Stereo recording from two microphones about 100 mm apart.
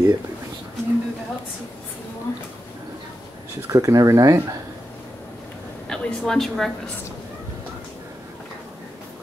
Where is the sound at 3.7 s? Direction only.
35° right (ahead or behind).